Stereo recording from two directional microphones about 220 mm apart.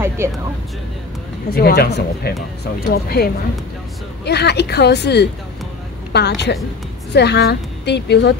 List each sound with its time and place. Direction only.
0.2 s speech: 10° right (ahead or behind)
1.5 s a woman's voice: 45° left (ahead or behind)